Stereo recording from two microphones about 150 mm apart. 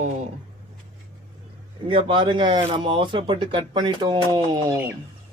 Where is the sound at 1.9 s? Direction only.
35° right (ahead or behind).